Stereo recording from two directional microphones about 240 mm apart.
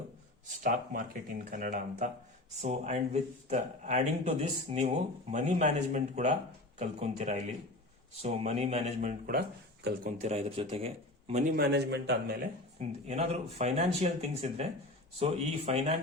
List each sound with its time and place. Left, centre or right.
0.6 s a man's voice: right
12.8 s a man's voice: right